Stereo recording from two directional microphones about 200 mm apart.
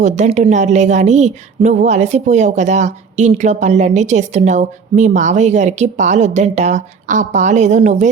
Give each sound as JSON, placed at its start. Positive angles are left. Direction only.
{"t": 0.0, "sound": "a woman's voice", "side_deg": -35}